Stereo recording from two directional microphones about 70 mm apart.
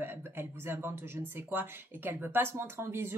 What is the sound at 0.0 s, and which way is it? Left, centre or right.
Speech, right.